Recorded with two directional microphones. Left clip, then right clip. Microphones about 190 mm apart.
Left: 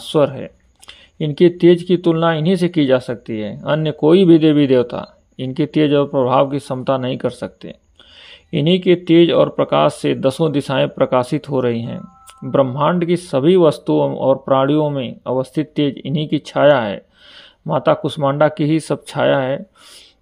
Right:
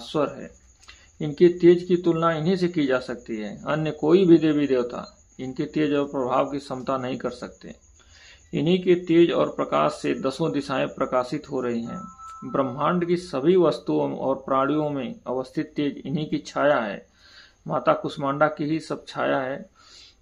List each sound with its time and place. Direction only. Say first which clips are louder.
0.0 s speech: left 10 dB; 40° left (ahead or behind)